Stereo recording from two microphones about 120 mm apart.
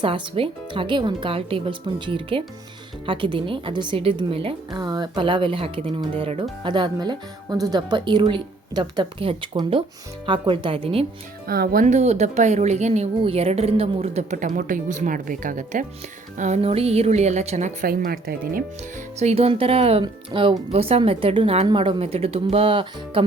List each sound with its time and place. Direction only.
0.0 s speech: 50° right (ahead or behind)
4.7 s a woman's voice: 35° right (ahead or behind); by 6.4 s 55° right (ahead or behind)
6.6 s speech: 40° right (ahead or behind)
11.9 s a woman's voice: 70° right (ahead or behind); by 15.9 s 90° right
16.6 s a woman's voice: 55° right (ahead or behind); by 17.8 s 75° right (ahead or behind)
19.2 s speech: 55° right (ahead or behind)
21.7 s speech: 45° right (ahead or behind)